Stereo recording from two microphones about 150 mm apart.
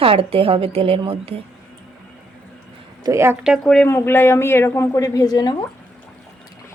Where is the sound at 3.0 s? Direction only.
20° right (ahead or behind).